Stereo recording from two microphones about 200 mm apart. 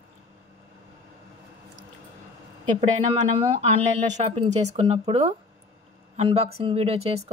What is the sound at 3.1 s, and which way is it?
Speech, 30° right (ahead or behind).